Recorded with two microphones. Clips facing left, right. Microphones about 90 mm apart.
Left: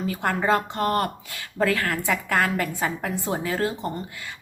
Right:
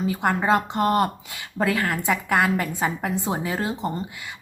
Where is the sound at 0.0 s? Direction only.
15° right (ahead or behind).